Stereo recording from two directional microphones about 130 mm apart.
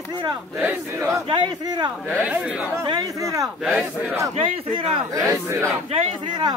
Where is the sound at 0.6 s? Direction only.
15° right (ahead or behind).